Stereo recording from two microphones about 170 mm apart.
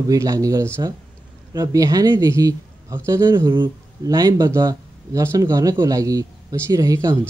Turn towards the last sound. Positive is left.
turn(degrees=-20)  # may be behind; listen again after turning